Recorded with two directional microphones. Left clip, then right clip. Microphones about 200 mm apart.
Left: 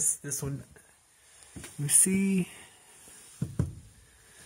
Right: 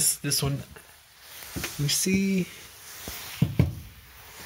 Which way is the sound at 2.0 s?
40° left (ahead or behind).